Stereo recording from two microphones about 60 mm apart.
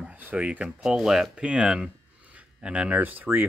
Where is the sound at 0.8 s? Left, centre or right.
Centre.